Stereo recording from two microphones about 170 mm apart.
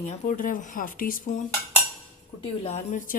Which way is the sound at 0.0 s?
50° left (ahead or behind).